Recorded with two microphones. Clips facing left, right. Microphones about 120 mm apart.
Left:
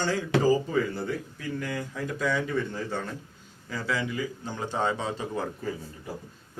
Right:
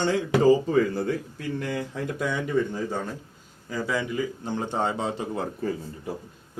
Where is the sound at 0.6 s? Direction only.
35° right (ahead or behind).